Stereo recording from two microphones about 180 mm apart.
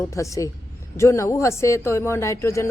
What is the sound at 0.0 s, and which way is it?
Speech, 15° left (ahead or behind).